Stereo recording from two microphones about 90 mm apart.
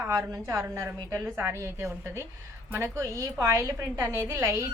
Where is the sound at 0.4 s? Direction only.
30° right (ahead or behind).